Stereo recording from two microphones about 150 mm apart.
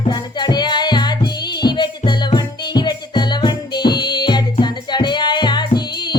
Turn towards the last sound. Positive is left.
turn(degrees=30)  # may be behind; listen again after turning